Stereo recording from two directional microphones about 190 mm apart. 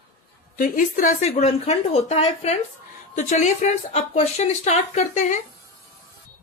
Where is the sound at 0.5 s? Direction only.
45° left (ahead or behind).